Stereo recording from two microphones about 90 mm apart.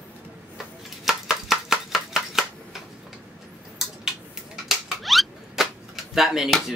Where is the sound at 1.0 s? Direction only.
5° right (ahead or behind).